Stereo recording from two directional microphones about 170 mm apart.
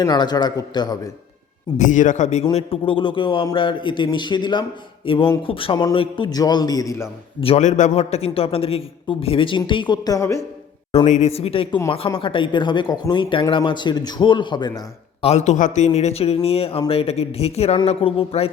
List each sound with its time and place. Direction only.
0.0 s speech: 25° left (ahead or behind)
1.8 s a man's voice: 50° left (ahead or behind); by 7.1 s 20° left (ahead or behind)
7.4 s a man's voice: 40° left (ahead or behind); by 10.4 s 20° left (ahead or behind)
11.0 s a man's voice: 45° left (ahead or behind); by 15.3 s 25° left (ahead or behind)
15.3 s a man's voice: 45° left (ahead or behind)